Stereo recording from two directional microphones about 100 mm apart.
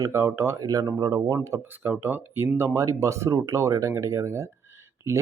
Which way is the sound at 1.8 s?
15° right (ahead or behind).